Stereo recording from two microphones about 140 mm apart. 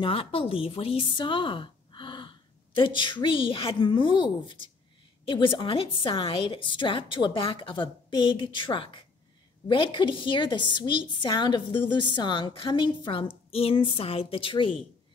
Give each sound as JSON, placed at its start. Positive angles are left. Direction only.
{"t": 0.0, "sound": "a woman's voice", "side_deg": 40}